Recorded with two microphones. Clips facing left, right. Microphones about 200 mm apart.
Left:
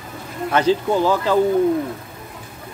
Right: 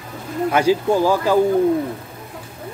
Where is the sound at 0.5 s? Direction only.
10° right (ahead or behind).